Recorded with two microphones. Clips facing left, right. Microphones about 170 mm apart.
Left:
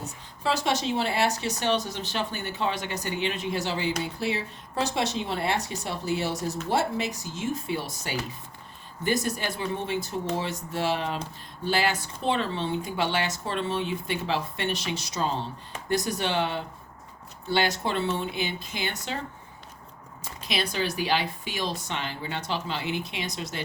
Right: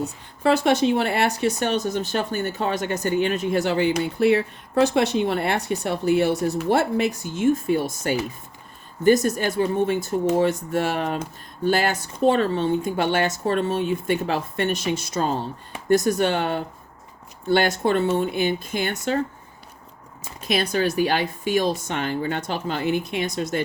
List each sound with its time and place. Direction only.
0.0 s a woman's voice: 60° right (ahead or behind)
20.4 s a woman's voice: 50° right (ahead or behind)